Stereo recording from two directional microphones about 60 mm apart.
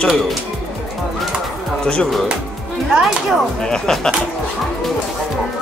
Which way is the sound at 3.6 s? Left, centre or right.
Centre.